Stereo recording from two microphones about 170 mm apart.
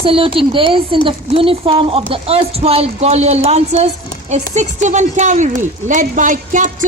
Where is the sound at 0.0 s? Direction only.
30° right (ahead or behind).